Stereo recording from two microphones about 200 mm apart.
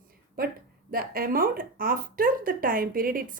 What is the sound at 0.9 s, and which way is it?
Speech, 45° right (ahead or behind).